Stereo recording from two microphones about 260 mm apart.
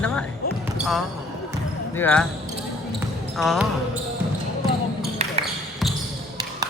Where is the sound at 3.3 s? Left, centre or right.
Centre.